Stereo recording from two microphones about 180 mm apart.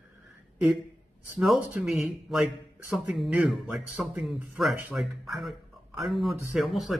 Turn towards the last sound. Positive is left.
turn(degrees=0)  # may be behind; listen again after turning